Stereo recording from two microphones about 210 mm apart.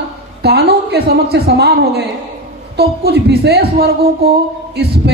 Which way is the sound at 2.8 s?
50° right (ahead or behind).